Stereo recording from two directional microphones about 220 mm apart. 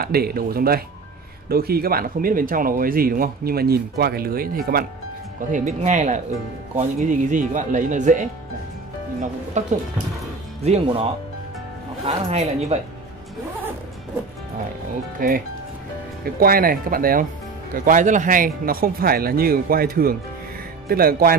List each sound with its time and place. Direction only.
0.0 s speech: 45° right (ahead or behind)
5.5 s speech: 30° right (ahead or behind)
15.1 s speech: 40° right (ahead or behind)